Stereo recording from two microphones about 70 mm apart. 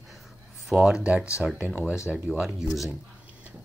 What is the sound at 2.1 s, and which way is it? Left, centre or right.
Speech, centre.